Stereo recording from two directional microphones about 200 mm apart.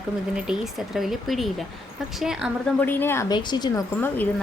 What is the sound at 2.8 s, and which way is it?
Speech, 10° left (ahead or behind).